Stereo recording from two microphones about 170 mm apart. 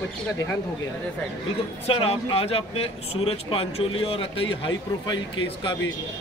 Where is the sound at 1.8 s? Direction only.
35° left (ahead or behind).